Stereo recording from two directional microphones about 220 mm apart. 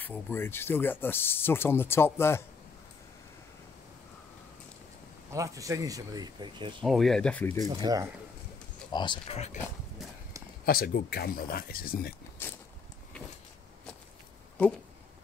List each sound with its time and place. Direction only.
0.0 s speech: 10° left (ahead or behind)
5.3 s speech: 15° right (ahead or behind)
6.8 s speech: centre (ahead or behind)
7.6 s speech: 15° right (ahead or behind)
8.9 s speech: 20° left (ahead or behind)
10.6 s speech: 45° left (ahead or behind)
12.4 s a sound: 10° left (ahead or behind)